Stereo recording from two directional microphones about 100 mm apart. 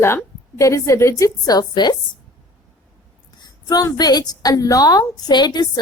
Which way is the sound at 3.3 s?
40° left (ahead or behind).